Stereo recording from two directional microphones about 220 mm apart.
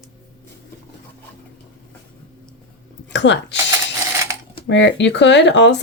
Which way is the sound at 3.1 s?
55° left (ahead or behind).